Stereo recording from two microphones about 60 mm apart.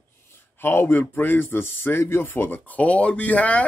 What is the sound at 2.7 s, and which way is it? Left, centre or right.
Speech, left.